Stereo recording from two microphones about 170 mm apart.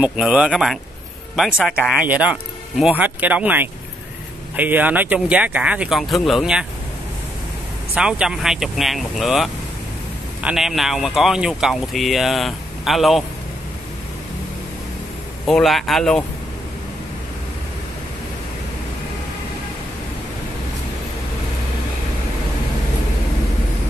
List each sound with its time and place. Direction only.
0.0 s speech: 5° right (ahead or behind)
7.9 s speech: 5° right (ahead or behind)
15.4 s speech: centre (ahead or behind)